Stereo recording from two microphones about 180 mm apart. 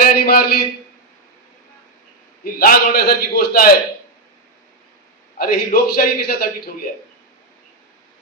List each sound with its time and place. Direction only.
0.0 s a sound: 55° left (ahead or behind)
2.4 s a man's voice: 55° left (ahead or behind)
5.4 s a man's voice: 55° left (ahead or behind)